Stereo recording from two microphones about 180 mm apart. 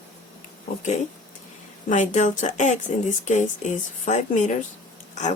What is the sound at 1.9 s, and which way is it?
Speech, 45° left (ahead or behind).